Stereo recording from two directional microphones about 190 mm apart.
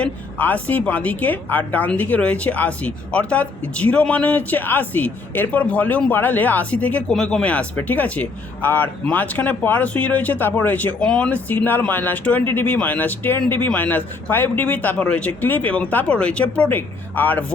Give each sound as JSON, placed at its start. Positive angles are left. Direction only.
{"t": 0.0, "sound": "a woman's voice", "side_deg": 10}